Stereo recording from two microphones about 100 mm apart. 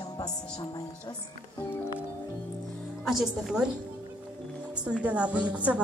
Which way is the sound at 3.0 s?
5° right (ahead or behind).